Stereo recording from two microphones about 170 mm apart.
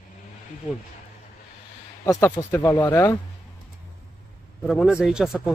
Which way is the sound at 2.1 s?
15° left (ahead or behind).